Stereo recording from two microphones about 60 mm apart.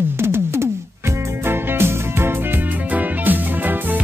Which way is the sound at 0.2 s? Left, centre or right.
Right.